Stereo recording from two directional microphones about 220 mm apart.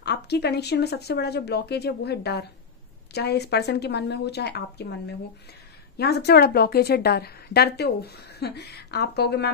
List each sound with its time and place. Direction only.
0.0 s a woman's voice: 50° left (ahead or behind)